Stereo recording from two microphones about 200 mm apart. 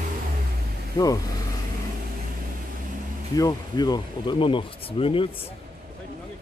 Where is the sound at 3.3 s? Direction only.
20° left (ahead or behind).